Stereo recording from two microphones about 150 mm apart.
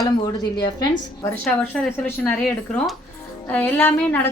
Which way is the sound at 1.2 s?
15° left (ahead or behind).